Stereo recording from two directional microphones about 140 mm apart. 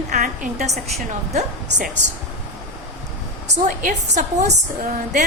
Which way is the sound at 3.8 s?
65° right (ahead or behind).